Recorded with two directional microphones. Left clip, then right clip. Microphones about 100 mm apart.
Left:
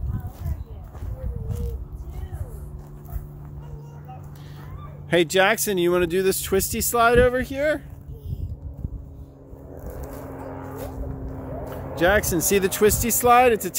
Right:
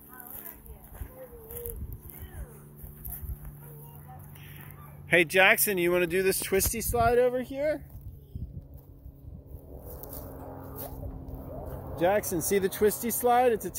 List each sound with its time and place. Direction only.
5.1 s speech: 50° left (ahead or behind); by 7.8 s 20° left (ahead or behind)
10.3 s music: 20° left (ahead or behind)
11.7 s speech: 15° left (ahead or behind)